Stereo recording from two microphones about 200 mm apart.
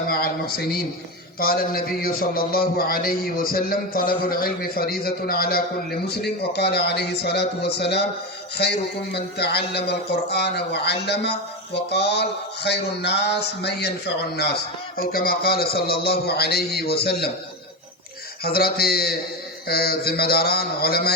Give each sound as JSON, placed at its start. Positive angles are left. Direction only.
{"t": 0.1, "sound": "a man's voice", "side_deg": 50}
{"t": 18.4, "sound": "a man's voice", "side_deg": 50}